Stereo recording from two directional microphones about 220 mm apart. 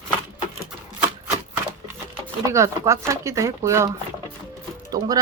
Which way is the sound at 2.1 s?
15° right (ahead or behind).